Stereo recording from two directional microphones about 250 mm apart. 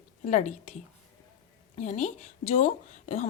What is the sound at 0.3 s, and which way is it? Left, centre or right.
A woman's voice, left.